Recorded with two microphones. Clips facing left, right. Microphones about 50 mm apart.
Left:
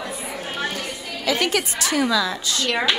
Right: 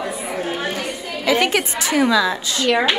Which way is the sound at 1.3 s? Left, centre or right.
Right.